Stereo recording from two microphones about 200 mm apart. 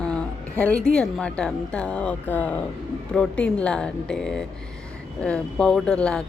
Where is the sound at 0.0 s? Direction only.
5° left (ahead or behind).